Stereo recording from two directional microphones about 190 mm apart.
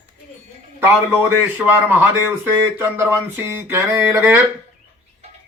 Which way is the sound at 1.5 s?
10° right (ahead or behind).